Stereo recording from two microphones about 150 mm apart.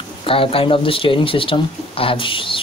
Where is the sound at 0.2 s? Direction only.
35° left (ahead or behind).